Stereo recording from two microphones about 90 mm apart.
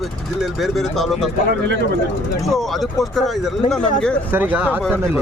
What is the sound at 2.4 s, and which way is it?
Speech, centre (ahead or behind).